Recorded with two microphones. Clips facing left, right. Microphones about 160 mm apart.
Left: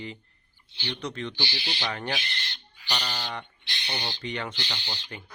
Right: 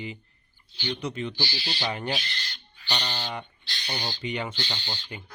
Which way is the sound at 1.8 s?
15° right (ahead or behind).